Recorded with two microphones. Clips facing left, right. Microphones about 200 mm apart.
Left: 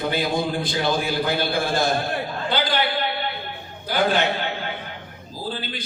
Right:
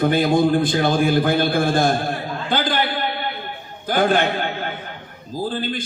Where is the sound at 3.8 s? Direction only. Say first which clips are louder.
Right 3 dB; 50° right (ahead or behind).